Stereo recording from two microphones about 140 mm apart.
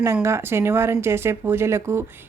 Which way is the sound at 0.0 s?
20° right (ahead or behind).